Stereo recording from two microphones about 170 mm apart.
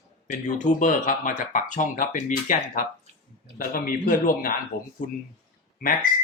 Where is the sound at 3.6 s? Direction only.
55° left (ahead or behind).